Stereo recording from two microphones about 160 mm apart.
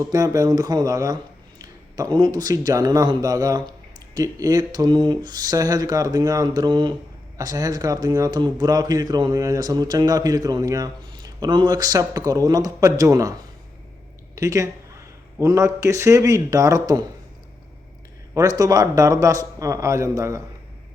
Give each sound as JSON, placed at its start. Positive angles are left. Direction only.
{"t": 0.0, "sound": "a man's voice", "side_deg": -20}
{"t": 14.3, "sound": "a man's voice", "side_deg": -20}
{"t": 18.3, "sound": "a man's voice", "side_deg": -20}